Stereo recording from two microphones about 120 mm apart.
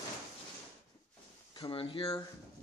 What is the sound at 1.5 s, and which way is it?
Speech, 45° left (ahead or behind).